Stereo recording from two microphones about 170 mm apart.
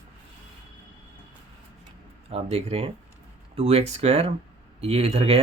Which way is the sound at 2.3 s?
35° right (ahead or behind).